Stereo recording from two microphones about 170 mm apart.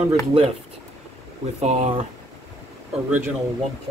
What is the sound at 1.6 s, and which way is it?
Speech, 40° right (ahead or behind).